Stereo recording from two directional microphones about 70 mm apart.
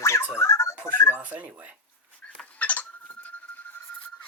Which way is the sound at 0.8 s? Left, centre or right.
Left.